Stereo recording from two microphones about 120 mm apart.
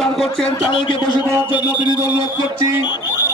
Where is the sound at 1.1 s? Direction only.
40° left (ahead or behind).